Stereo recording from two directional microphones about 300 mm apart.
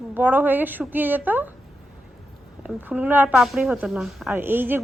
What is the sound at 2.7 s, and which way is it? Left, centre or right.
A woman's voice, centre.